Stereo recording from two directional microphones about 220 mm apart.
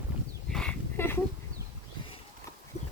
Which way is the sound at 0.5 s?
5° left (ahead or behind).